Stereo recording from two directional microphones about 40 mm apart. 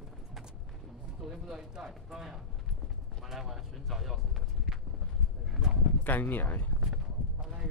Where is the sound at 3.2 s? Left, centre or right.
Centre.